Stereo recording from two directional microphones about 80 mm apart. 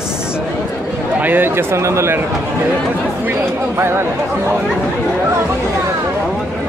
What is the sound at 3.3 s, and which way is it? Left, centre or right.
Speech, right.